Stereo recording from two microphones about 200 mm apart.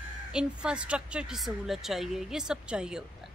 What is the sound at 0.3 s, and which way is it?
A woman's voice, 5° right (ahead or behind).